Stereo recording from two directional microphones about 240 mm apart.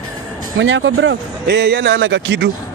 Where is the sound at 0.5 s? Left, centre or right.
Right.